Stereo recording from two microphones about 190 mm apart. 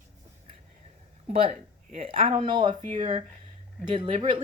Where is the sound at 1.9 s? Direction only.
30° right (ahead or behind).